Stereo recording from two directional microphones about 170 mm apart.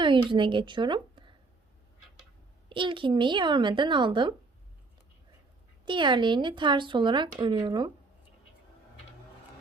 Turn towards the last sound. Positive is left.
turn(degrees=-25)  # may be behind; listen again after turning